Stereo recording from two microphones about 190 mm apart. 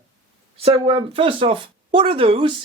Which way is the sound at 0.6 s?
30° right (ahead or behind).